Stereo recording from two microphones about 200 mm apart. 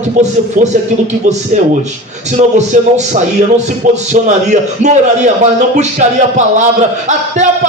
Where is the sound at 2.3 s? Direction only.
35° right (ahead or behind).